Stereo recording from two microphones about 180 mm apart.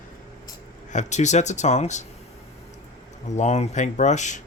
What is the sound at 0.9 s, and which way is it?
Speech, 40° left (ahead or behind).